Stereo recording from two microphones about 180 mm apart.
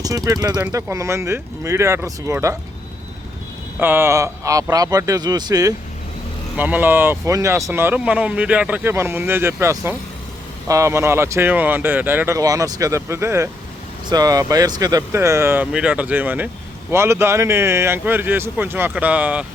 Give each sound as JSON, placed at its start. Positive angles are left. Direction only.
{"t": 0.0, "sound": "a man's voice", "side_deg": -20}
{"t": 3.8, "sound": "a man's voice", "side_deg": -10}
{"t": 6.6, "sound": "speech", "side_deg": -10}